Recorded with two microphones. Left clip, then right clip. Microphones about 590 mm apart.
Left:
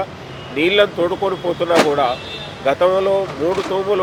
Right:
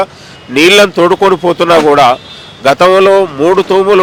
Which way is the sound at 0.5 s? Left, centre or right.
Right.